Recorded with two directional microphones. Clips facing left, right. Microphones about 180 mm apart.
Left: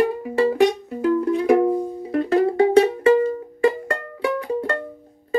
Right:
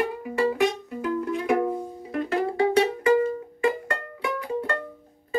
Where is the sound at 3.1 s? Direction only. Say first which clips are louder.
Left 4 dB; 30° left (ahead or behind).